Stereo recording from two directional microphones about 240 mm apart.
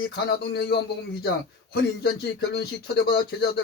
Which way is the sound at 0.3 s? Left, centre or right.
Left.